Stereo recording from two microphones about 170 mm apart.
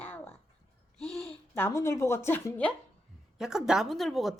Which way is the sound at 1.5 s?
15° left (ahead or behind).